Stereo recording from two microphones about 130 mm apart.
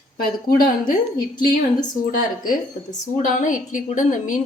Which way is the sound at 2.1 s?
90° left.